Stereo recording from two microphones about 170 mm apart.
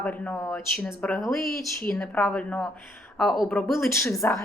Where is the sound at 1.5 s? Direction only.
60° left (ahead or behind).